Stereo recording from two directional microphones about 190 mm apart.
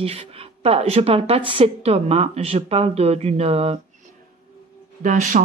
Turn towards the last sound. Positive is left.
turn(degrees=-40)  # may be behind; listen again after turning